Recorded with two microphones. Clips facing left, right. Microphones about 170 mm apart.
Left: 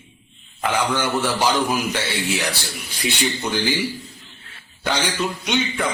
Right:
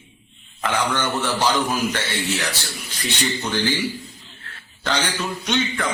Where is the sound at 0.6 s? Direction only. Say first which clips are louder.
Left 1 dB; 10° left (ahead or behind).